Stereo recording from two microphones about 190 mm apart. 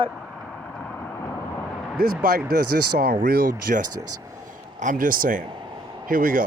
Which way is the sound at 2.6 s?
55° right (ahead or behind).